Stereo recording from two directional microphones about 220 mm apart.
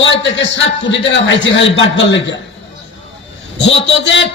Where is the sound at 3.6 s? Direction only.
55° left (ahead or behind).